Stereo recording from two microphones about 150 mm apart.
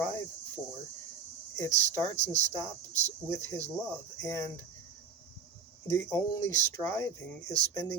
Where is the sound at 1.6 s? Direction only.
15° left (ahead or behind).